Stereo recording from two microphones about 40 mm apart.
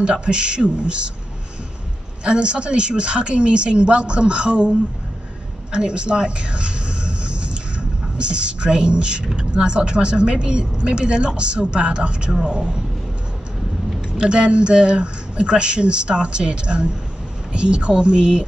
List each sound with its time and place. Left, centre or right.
0.0 s a woman's voice: right
2.2 s a woman's voice: right
5.7 s a sound: right
9.4 s a woman's voice: right
14.1 s a woman's voice: right